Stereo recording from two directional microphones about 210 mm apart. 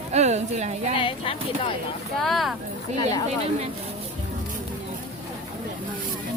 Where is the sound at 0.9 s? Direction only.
25° left (ahead or behind).